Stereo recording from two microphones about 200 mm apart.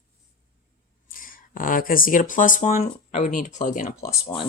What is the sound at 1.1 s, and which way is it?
Speech, 45° left (ahead or behind).